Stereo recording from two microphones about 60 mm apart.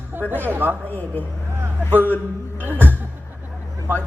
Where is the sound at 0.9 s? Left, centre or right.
Left.